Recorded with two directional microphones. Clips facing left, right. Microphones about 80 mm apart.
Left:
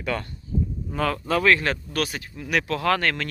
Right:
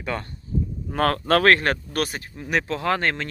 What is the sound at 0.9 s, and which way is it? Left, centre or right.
Speech, right.